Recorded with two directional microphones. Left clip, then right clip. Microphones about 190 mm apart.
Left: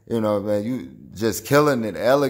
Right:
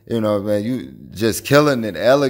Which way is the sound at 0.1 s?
15° right (ahead or behind).